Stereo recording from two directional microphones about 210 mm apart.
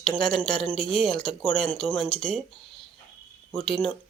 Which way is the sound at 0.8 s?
Centre (ahead or behind).